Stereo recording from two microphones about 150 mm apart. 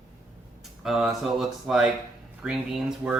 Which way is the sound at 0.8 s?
Centre (ahead or behind).